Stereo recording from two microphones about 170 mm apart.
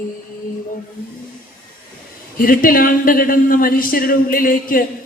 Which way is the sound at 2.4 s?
55° left (ahead or behind).